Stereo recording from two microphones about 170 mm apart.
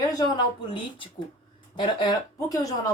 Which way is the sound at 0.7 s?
30° left (ahead or behind).